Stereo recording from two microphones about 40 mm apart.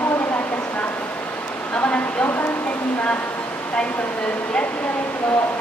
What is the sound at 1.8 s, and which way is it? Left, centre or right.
Speech, left.